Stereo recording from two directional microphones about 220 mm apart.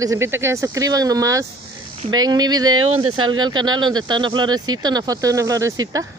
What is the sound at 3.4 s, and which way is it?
Speech, 20° right (ahead or behind).